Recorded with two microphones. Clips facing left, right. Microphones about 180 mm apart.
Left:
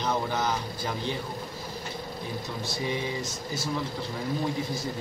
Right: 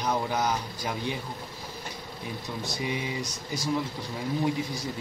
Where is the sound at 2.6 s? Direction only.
15° right (ahead or behind).